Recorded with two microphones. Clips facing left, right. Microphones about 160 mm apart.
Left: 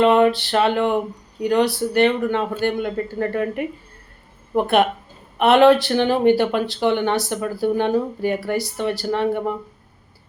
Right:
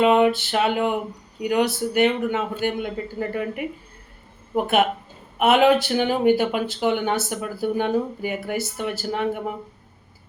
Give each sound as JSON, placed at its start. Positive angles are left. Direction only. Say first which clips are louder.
{"t": 0.0, "sound": "a man's voice", "louder": "left 2 dB", "side_deg": -5}